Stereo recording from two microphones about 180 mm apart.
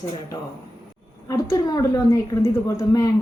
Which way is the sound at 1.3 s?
20° left (ahead or behind).